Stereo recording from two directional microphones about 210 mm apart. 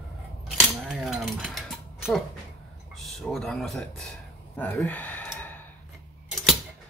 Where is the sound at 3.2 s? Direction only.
Centre (ahead or behind).